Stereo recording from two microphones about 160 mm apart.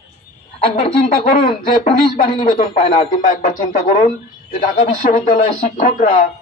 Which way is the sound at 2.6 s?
50° left (ahead or behind).